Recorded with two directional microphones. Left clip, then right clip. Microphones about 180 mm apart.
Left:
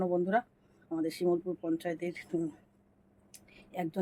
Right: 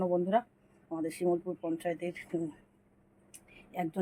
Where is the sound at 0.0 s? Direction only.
Centre (ahead or behind).